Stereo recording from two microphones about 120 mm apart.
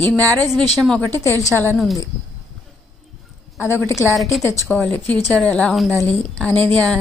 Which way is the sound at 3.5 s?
20° left (ahead or behind).